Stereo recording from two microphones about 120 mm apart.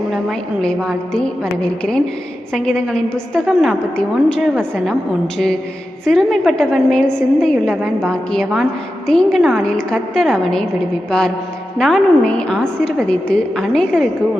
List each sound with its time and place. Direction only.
0.1 s a woman's voice: centre (ahead or behind)
2.5 s a woman's voice: 5° left (ahead or behind)
6.1 s a woman's voice: centre (ahead or behind)
11.8 s a woman's voice: 5° left (ahead or behind)